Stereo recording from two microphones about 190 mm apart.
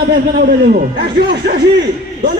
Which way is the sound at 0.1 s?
55° right (ahead or behind).